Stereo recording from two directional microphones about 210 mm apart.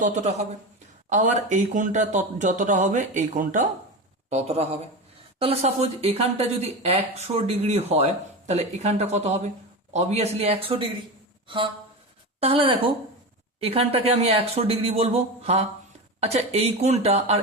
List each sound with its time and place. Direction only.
0.0 s speech: 35° right (ahead or behind)
11.4 s a sound: 25° right (ahead or behind)
12.4 s speech: 25° right (ahead or behind)